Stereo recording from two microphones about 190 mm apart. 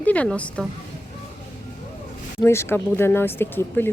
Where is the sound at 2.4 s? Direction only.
15° left (ahead or behind).